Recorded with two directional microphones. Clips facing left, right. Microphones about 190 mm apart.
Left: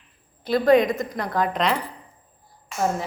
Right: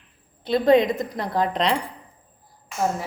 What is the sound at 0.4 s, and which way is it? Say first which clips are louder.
A woman's voice: even; 25° right (ahead or behind).